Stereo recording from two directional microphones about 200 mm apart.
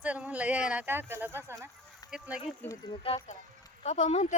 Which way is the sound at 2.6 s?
10° left (ahead or behind).